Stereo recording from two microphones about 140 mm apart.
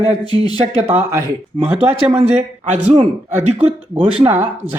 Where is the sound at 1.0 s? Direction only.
15° right (ahead or behind).